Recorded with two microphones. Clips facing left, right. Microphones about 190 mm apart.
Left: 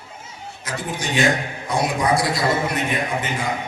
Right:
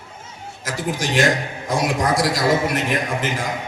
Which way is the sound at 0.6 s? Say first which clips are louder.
Right 3 dB; 90° right.